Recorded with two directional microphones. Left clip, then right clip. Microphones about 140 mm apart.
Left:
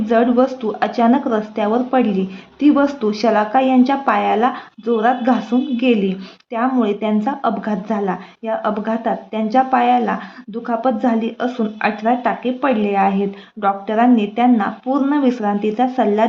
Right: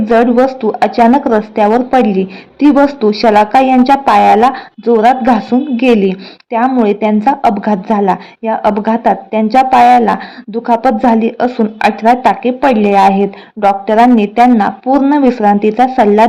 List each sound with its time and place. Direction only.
0.1 s speech: 35° right (ahead or behind)